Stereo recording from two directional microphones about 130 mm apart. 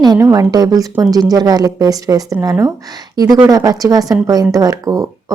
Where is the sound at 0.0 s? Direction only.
30° right (ahead or behind).